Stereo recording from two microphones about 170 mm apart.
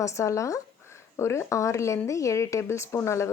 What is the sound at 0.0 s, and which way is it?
Speech, 15° left (ahead or behind).